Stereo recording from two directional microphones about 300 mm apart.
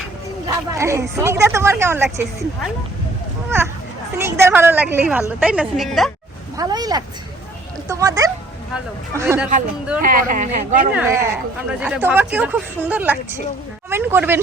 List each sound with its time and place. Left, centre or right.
0.4 s speech: centre
4.2 s speech: centre
6.6 s speech: centre
10.0 s speech: right
10.9 s speech: centre